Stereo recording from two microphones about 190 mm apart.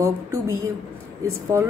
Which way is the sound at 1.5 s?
15° right (ahead or behind).